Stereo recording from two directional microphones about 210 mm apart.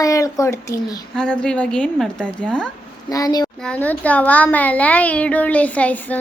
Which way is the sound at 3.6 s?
5° left (ahead or behind).